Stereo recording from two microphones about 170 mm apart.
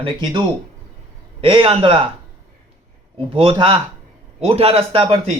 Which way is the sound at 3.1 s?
35° right (ahead or behind).